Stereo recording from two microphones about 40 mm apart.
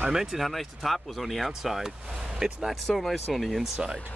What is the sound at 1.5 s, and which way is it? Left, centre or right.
Speech, centre.